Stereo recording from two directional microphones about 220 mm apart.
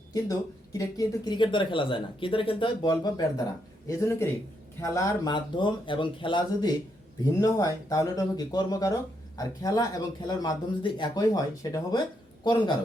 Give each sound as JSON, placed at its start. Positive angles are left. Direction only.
{"t": 0.1, "sound": "speech", "side_deg": 15}